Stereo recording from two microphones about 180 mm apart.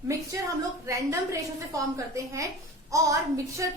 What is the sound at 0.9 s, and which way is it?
Speech, 15° right (ahead or behind).